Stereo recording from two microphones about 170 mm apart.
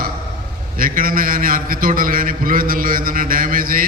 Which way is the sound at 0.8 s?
55° right (ahead or behind).